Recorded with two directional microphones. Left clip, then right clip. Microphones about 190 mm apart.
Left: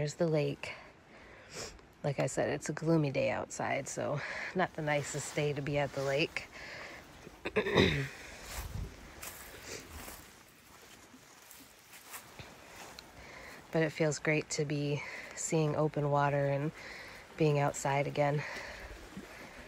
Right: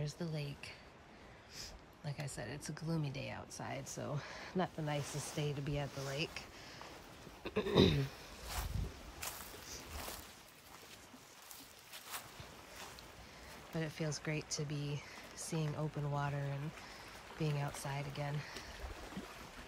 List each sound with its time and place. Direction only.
0.0 s speech: 10° right (ahead or behind)
6.0 s a sound: 10° right (ahead or behind)
7.4 s throat clearing: 20° right (ahead or behind)
13.7 s speech: 10° right (ahead or behind)